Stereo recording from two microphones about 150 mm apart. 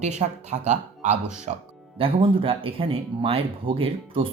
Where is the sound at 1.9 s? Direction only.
35° right (ahead or behind).